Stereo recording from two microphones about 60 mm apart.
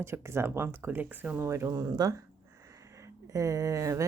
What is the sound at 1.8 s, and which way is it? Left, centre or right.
Speech, right.